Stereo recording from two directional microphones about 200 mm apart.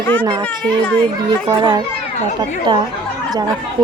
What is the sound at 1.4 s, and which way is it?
Speech, 20° right (ahead or behind).